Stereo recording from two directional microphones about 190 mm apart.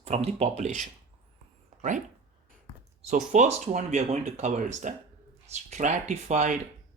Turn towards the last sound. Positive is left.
turn(degrees=-40)  # may be behind; listen again after turning